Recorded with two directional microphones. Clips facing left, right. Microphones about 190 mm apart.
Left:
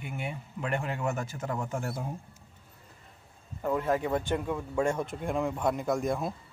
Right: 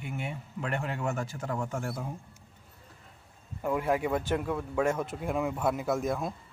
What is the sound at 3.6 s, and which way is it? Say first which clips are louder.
Speech: even; 10° right (ahead or behind).